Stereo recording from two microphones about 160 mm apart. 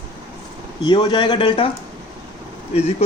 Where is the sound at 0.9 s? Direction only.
25° left (ahead or behind).